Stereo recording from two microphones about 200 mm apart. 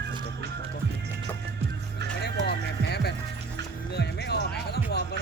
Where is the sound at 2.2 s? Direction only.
55° left (ahead or behind).